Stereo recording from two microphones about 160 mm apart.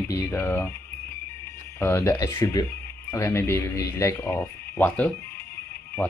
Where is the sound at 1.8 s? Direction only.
15° left (ahead or behind).